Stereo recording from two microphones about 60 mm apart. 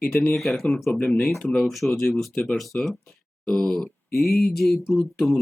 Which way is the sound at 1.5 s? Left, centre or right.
Centre.